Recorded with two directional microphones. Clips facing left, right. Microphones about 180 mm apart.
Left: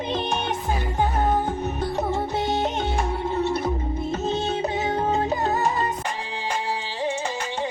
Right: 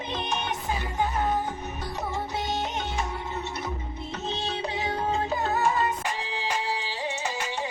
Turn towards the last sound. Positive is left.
turn(degrees=40)  # may be behind; listen again after turning